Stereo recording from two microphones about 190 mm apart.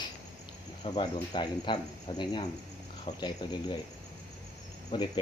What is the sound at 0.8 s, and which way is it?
Speech, 25° left (ahead or behind).